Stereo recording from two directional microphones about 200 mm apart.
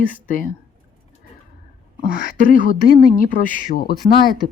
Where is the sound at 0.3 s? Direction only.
40° left (ahead or behind).